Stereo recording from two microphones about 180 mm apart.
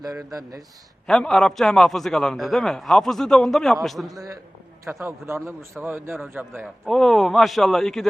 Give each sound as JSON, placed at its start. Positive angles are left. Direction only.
{"t": 0.3, "sound": "speech", "side_deg": -20}
{"t": 1.0, "sound": "a man's voice", "side_deg": 5}
{"t": 4.1, "sound": "a man's voice", "side_deg": -20}
{"t": 6.8, "sound": "a man's voice", "side_deg": 0}